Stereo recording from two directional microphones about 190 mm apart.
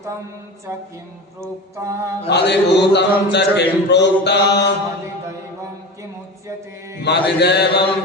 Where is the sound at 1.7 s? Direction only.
15° right (ahead or behind).